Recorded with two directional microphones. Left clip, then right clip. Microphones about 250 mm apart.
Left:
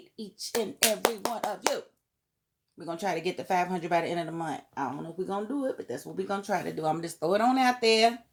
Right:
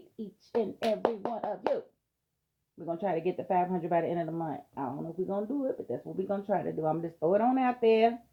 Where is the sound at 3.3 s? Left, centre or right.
Left.